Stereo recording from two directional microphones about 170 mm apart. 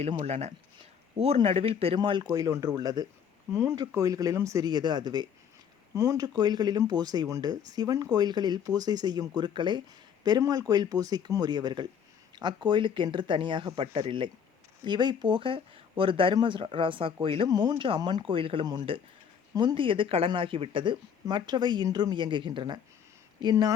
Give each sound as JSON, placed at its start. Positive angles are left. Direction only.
{"t": 0.2, "sound": "speech", "side_deg": -40}